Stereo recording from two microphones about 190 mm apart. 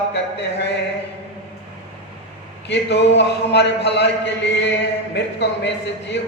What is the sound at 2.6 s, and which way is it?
A man's voice, 65° left (ahead or behind).